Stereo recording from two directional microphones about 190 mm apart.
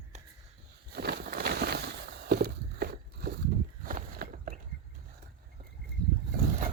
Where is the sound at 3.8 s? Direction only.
50° right (ahead or behind).